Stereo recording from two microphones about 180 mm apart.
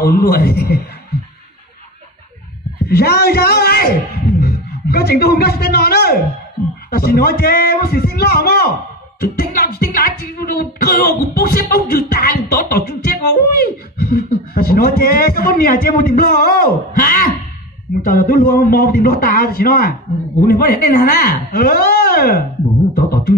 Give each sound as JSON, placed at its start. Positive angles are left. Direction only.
{"t": 0.0, "sound": "music", "side_deg": 55}
{"t": 2.9, "sound": "music", "side_deg": 60}
{"t": 4.4, "sound": "a man's voice", "side_deg": 60}
{"t": 6.9, "sound": "music", "side_deg": 60}